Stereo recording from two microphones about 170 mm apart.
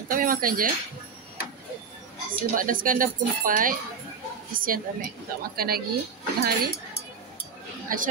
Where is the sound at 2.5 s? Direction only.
55° right (ahead or behind).